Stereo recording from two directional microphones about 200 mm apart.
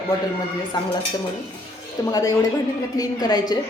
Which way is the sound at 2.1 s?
20° left (ahead or behind).